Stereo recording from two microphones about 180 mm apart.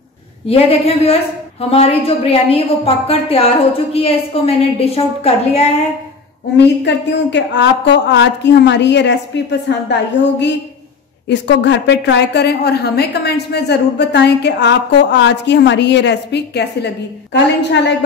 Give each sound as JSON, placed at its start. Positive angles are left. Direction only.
{"t": 0.5, "sound": "a woman's voice", "side_deg": 35}
{"t": 6.5, "sound": "a woman's voice", "side_deg": 75}